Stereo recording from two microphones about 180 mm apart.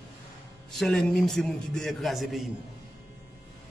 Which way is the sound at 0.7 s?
Centre (ahead or behind).